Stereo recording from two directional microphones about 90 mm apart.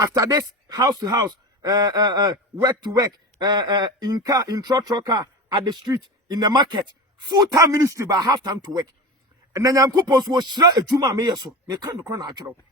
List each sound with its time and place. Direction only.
0.0 s a man's voice: 45° right (ahead or behind)
9.5 s music: 40° right (ahead or behind)
10.2 s a man's voice: 55° right (ahead or behind)